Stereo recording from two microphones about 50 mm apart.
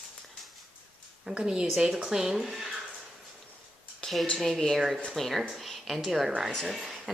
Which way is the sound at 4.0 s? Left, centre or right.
Centre.